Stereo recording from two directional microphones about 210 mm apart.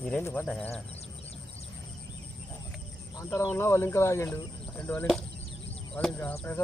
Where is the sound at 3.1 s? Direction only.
15° left (ahead or behind).